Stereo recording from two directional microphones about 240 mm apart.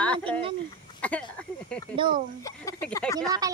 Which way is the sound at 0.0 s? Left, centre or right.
Centre.